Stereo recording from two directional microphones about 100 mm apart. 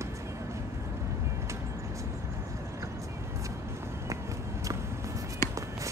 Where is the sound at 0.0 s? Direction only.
30° right (ahead or behind).